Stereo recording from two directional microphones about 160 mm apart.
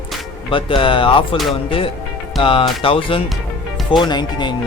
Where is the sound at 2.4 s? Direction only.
35° left (ahead or behind).